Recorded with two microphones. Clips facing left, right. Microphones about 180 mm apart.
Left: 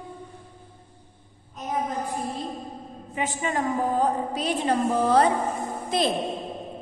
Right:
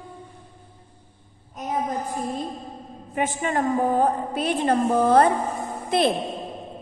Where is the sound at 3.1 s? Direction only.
50° right (ahead or behind).